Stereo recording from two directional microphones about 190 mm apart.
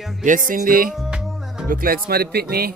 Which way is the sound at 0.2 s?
45° right (ahead or behind).